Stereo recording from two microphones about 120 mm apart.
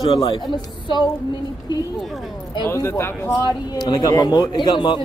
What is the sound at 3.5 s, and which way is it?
Speech, 35° left (ahead or behind).